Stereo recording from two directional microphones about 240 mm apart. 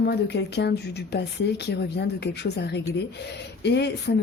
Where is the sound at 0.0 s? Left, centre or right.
Left.